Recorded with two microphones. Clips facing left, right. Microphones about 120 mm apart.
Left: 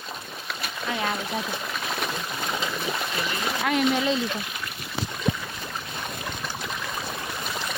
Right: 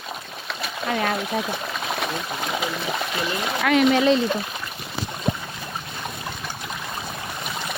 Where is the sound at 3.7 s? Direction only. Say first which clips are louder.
Right 6 dB; 80° right.